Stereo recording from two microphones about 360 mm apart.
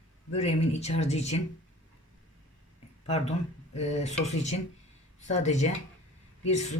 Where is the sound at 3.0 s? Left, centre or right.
Centre.